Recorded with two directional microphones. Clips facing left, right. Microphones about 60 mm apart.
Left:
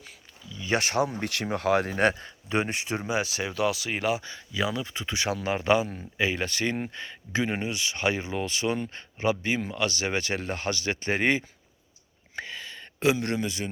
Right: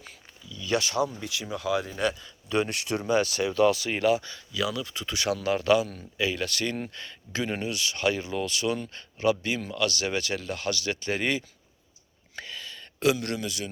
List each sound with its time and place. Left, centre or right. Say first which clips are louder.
0.5 s a sound: even; left
0.8 s speech: left 3 dB; left
2.5 s speech: right 1 dB; left
3.1 s speech: right 6 dB; centre; by 13.7 s left